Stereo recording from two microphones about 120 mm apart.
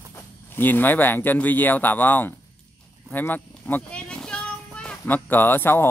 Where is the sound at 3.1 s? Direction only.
15° left (ahead or behind).